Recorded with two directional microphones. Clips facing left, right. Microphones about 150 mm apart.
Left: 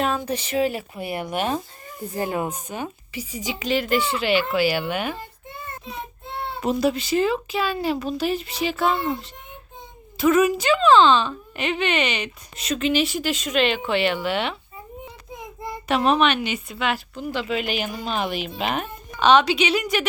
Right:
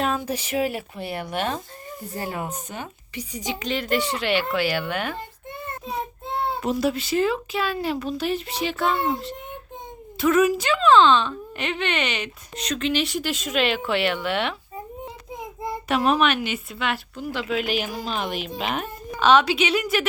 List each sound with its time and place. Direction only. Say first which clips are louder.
0.2 s speech: left 2 dB; 10° right (ahead or behind)
0.9 s speech: left 2 dB; 15° left (ahead or behind)
6.6 s speech: left 5 dB; centre (ahead or behind)
15.9 s speech: left 1 dB; centre (ahead or behind)